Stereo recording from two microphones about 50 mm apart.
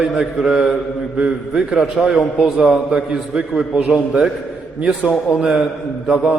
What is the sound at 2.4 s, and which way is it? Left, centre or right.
Speech, right.